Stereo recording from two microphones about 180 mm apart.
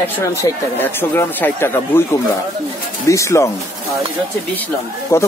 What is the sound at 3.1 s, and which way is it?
Speech, 15° left (ahead or behind).